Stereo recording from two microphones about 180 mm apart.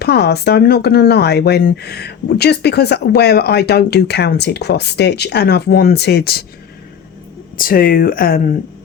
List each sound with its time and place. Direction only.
0.0 s speech: 60° left (ahead or behind)
7.5 s speech: 50° left (ahead or behind)